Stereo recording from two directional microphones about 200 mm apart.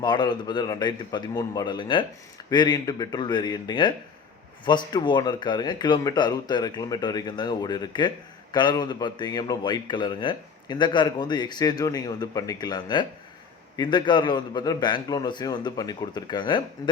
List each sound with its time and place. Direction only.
0.0 s a man's voice: 20° left (ahead or behind)